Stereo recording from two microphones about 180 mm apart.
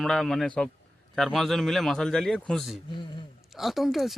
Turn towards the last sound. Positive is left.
turn(degrees=0)  # may be behind; listen again after turning